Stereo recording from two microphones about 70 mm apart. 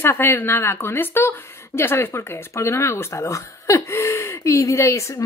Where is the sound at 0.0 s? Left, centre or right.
Left.